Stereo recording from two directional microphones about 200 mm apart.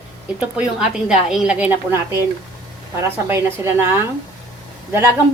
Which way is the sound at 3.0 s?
10° right (ahead or behind).